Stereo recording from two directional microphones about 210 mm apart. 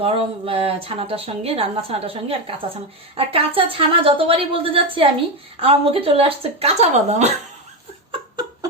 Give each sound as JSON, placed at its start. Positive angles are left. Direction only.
{"t": 0.0, "sound": "speech", "side_deg": -25}